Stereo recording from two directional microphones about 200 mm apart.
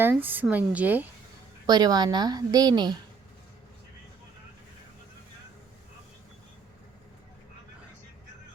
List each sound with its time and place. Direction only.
0.0 s a woman's voice: 10° right (ahead or behind)
1.6 s a woman's voice: 20° right (ahead or behind)